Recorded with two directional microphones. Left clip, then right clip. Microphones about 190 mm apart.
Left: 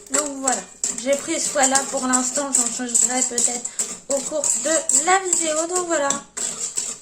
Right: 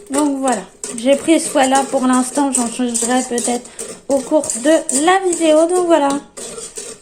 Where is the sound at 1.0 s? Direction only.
25° right (ahead or behind).